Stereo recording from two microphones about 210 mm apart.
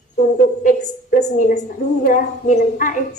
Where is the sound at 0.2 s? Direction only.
45° left (ahead or behind).